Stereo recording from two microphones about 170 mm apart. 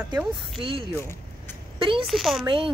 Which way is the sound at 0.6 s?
30° right (ahead or behind).